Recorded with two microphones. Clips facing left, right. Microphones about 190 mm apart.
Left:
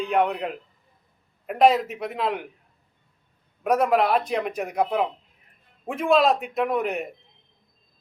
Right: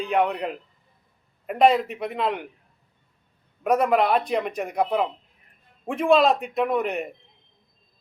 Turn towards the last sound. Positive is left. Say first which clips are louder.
# right 1 dB
turn(degrees=0)  # may be behind; listen again after turning